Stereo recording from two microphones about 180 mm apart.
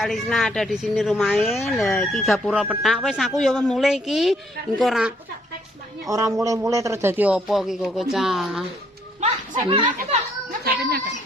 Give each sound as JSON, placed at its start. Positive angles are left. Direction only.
{"t": 0.0, "sound": "speech", "side_deg": 0}
{"t": 6.1, "sound": "a man's voice", "side_deg": -20}
{"t": 9.2, "sound": "a sound", "side_deg": -30}
{"t": 10.6, "sound": "children playing", "side_deg": -55}